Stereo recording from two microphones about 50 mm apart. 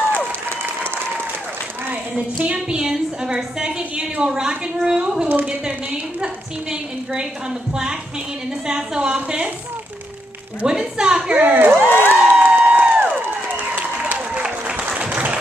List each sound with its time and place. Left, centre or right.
1.9 s a sound: right; by 3.7 s centre
4.2 s a woman's voice: centre
8.6 s a sound: centre
10.7 s a woman's voice: centre
11.3 s speech: right
12.0 s crowd: right
14.1 s applause: centre